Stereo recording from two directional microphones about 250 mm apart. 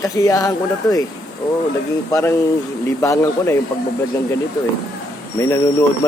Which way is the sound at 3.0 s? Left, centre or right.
Centre.